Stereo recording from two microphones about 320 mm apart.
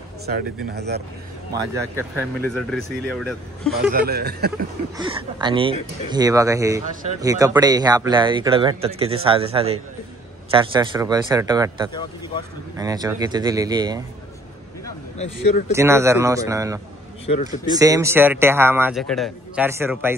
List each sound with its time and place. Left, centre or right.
0.7 s speech: right
2.1 s speech: centre
3.9 s speech: right
4.9 s speech: centre
15.1 s speech: left
15.7 s speech: centre
17.3 s speech: left
17.6 s speech: centre